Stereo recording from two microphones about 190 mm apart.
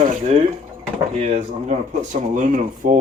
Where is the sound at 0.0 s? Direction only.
40° right (ahead or behind).